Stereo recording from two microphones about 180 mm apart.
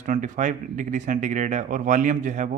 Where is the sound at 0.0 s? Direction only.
45° right (ahead or behind).